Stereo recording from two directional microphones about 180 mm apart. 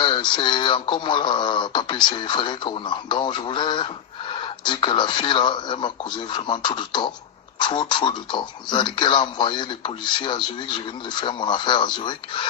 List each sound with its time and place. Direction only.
0.0 s speech: 25° left (ahead or behind)